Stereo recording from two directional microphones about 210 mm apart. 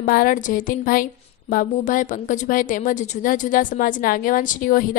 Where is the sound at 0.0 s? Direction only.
40° left (ahead or behind).